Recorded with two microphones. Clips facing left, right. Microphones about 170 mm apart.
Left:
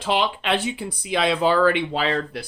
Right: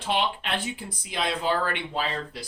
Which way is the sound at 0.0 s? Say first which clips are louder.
Left 4 dB; 90° left.